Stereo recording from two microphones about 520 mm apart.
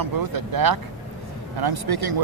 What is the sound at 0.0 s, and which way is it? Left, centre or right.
Speech, right.